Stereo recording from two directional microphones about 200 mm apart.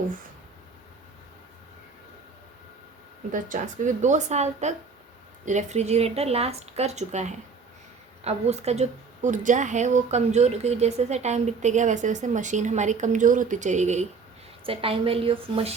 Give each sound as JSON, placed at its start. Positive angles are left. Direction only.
{"t": 3.3, "sound": "a woman's voice", "side_deg": -40}